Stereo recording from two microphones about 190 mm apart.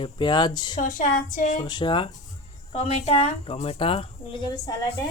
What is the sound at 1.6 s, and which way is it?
A woman's voice, 20° left (ahead or behind).